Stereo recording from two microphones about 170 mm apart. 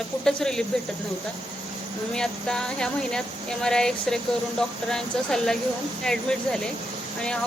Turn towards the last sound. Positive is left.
turn(degrees=5)  # may be behind; listen again after turning